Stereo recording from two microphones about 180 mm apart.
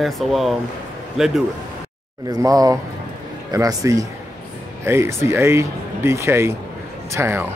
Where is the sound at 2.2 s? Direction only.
20° right (ahead or behind).